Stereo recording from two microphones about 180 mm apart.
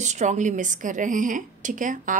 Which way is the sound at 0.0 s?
40° right (ahead or behind).